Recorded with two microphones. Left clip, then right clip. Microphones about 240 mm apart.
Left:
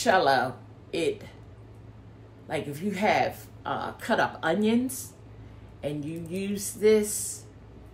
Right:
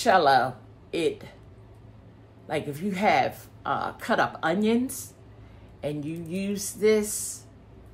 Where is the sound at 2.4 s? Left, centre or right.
Centre.